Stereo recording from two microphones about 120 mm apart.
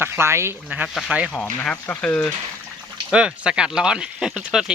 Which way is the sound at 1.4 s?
10° left (ahead or behind).